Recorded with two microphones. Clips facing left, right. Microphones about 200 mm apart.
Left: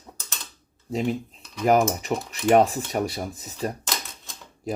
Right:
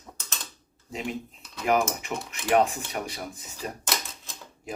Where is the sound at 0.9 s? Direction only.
35° left (ahead or behind).